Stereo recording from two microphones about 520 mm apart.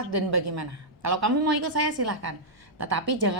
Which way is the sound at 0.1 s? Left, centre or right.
Right.